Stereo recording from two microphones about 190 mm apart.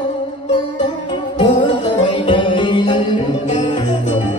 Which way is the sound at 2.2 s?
25° left (ahead or behind).